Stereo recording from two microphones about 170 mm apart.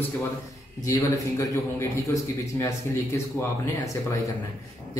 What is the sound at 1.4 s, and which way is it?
A man's voice, 15° left (ahead or behind).